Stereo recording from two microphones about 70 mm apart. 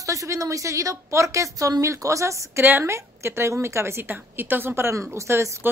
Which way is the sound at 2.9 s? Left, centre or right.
Right.